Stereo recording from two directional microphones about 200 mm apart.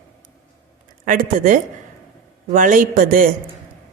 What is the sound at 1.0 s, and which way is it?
A woman's voice, 40° right (ahead or behind).